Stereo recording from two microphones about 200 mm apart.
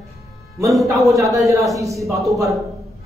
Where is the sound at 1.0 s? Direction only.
Centre (ahead or behind).